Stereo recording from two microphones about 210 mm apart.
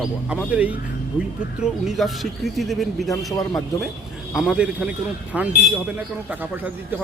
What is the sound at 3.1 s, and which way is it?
Speech, 15° left (ahead or behind).